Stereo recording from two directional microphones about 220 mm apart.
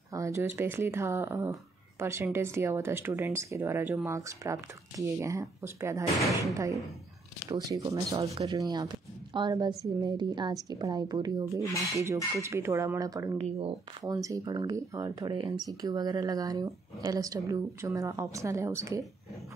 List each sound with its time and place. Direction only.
0.1 s a sound: 15° right (ahead or behind)
0.6 s speech: 10° right (ahead or behind)
13.4 s speech: 25° right (ahead or behind)